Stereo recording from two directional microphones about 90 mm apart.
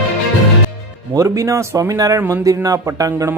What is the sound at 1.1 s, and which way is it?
Speech, 35° right (ahead or behind).